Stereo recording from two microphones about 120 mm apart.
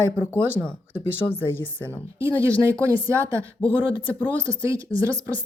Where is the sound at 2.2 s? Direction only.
25° right (ahead or behind).